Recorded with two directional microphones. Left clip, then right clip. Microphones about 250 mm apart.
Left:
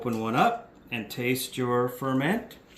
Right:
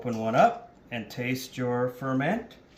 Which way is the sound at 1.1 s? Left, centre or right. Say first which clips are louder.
Left 4 dB; right.